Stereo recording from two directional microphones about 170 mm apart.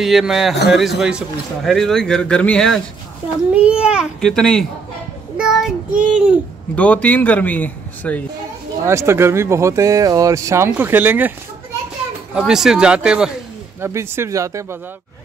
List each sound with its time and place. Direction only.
0.0 s a man's voice: centre (ahead or behind)
5.4 s child singing: 5° right (ahead or behind)
6.7 s a man's voice: 10° left (ahead or behind)
8.8 s speech: 15° right (ahead or behind)
12.4 s a man's voice: 5° right (ahead or behind)